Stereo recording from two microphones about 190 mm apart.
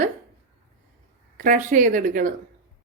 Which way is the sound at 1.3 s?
45° right (ahead or behind).